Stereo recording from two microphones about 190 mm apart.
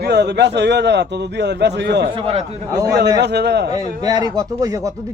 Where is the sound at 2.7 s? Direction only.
15° right (ahead or behind).